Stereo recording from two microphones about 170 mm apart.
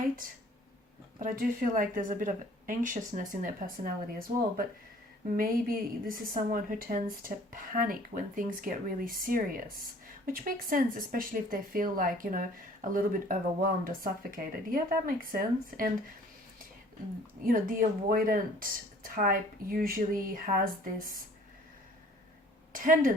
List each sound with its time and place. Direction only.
1.2 s a woman's voice: 55° right (ahead or behind)
17.4 s speech: 55° right (ahead or behind)
22.7 s a woman's voice: 55° right (ahead or behind)